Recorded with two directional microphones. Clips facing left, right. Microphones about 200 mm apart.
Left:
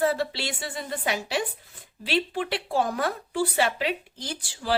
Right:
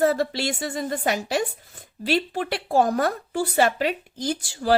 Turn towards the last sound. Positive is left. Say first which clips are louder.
# right 8 dB
turn(degrees=-45)  # may be behind; listen again after turning